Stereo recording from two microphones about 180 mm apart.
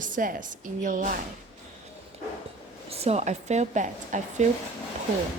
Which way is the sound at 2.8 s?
35° right (ahead or behind).